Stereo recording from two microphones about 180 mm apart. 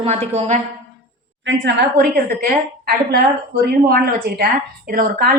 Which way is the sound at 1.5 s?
70° right (ahead or behind).